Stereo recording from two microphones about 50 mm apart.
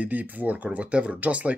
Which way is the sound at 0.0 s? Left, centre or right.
Right.